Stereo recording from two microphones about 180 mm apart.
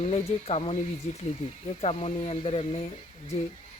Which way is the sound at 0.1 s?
35° left (ahead or behind).